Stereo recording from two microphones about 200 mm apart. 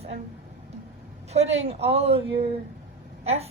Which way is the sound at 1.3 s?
30° right (ahead or behind).